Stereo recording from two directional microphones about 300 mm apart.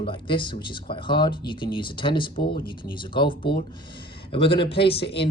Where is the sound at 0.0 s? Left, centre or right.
Centre.